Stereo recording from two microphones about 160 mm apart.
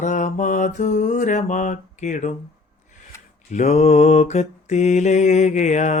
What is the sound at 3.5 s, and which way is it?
Mantra, 45° left (ahead or behind).